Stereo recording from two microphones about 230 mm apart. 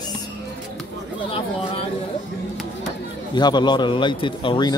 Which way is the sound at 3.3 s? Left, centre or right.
Centre.